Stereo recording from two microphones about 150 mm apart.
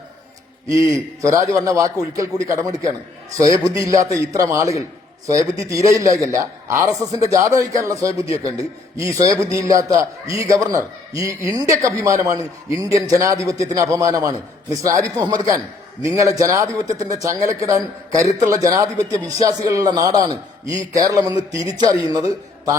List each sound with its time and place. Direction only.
1.2 s a man's voice: 20° right (ahead or behind)